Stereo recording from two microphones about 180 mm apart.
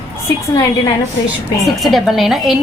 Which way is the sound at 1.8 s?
Centre (ahead or behind).